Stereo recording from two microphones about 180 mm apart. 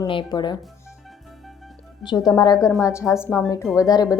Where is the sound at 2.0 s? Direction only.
20° left (ahead or behind).